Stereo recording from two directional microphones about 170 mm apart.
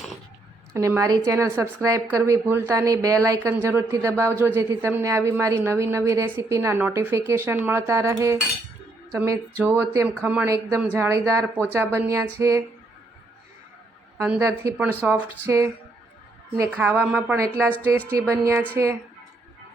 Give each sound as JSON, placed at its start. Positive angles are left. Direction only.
{"t": 0.7, "sound": "a woman's voice", "side_deg": -15}
{"t": 14.2, "sound": "a woman's voice", "side_deg": -15}